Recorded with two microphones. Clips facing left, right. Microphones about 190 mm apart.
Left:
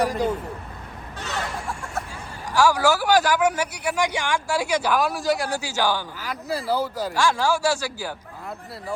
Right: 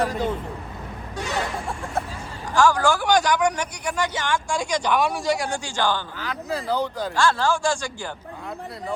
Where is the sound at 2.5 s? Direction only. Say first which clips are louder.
Even; 10° left (ahead or behind).